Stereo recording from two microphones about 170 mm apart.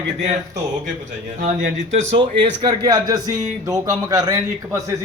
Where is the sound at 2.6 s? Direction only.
25° right (ahead or behind).